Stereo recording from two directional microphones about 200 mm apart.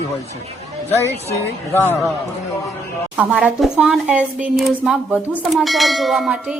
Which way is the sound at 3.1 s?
5° right (ahead or behind).